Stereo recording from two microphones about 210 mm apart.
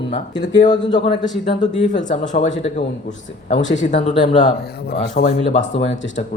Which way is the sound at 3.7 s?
35° left (ahead or behind).